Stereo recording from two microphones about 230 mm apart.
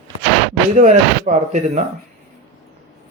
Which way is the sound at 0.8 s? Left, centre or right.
Right.